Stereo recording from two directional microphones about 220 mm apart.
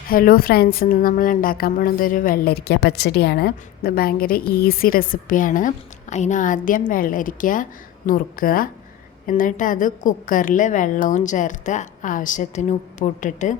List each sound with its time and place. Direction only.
0.1 s a woman's voice: 40° left (ahead or behind)